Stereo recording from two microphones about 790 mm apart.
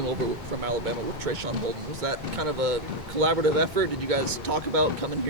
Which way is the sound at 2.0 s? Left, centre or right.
Right.